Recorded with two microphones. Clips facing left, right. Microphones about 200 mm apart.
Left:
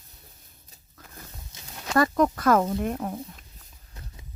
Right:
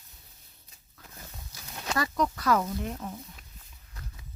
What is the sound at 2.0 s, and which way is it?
Speech, 50° left (ahead or behind).